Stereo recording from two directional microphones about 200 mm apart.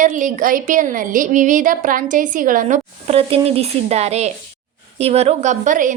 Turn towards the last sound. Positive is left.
turn(degrees=-40)  # may be behind; listen again after turning